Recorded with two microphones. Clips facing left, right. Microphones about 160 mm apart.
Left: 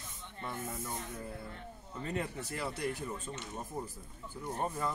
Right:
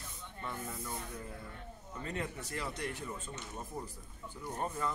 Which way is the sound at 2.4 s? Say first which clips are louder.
Left 3 dB; 10° left (ahead or behind).